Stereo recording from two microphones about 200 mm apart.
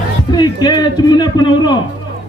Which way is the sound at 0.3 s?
20° left (ahead or behind).